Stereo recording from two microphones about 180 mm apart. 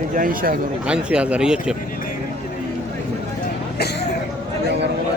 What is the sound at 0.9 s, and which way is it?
Speech, 5° right (ahead or behind).